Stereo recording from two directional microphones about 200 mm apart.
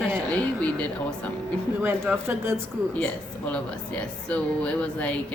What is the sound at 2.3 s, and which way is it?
Speech, 10° right (ahead or behind).